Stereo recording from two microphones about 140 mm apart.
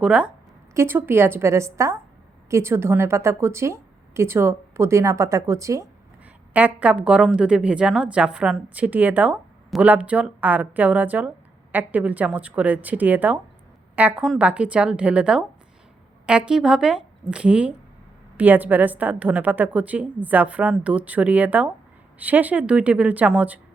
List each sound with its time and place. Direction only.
0.0 s a woman's voice: 10° right (ahead or behind)
6.5 s a woman's voice: 10° right (ahead or behind)